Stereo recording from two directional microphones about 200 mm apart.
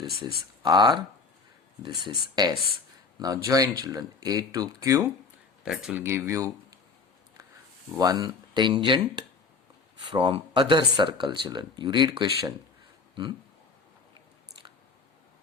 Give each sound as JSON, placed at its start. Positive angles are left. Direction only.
{"t": 0.6, "sound": "speech", "side_deg": -20}
{"t": 2.0, "sound": "speech", "side_deg": -20}
{"t": 5.6, "sound": "speech", "side_deg": 0}
{"t": 7.9, "sound": "speech", "side_deg": -20}